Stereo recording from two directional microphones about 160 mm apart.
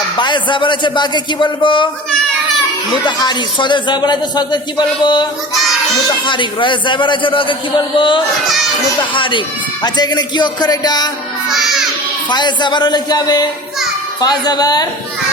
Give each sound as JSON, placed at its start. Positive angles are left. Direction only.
{"t": 0.2, "sound": "speech", "side_deg": 30}
{"t": 3.1, "sound": "speech", "side_deg": 25}
{"t": 11.4, "sound": "music", "side_deg": 0}
{"t": 12.3, "sound": "speech", "side_deg": 25}